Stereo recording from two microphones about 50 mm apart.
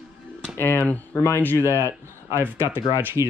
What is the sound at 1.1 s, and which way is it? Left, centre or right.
Speech, left.